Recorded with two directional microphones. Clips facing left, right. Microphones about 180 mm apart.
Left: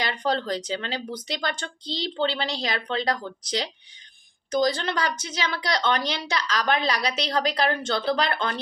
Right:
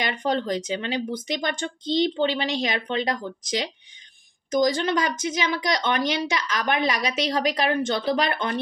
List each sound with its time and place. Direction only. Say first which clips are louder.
0.0 s speech: right 1 dB; 20° right (ahead or behind)
4.5 s a woman's voice: right 2 dB; 20° right (ahead or behind)